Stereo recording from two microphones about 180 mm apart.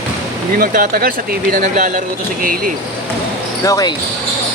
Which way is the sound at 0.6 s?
55° right (ahead or behind).